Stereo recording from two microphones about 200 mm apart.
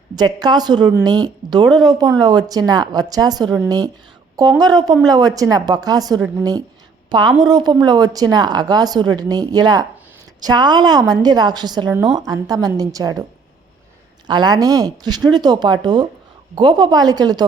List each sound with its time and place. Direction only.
0.2 s a woman's voice: 20° right (ahead or behind)
14.3 s a woman's voice: 20° right (ahead or behind)